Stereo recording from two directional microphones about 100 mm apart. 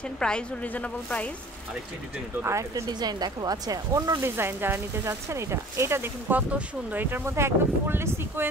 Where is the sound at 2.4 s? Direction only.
30° right (ahead or behind).